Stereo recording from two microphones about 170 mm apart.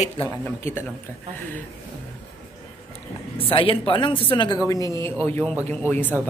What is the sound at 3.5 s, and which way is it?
Speech, 30° left (ahead or behind).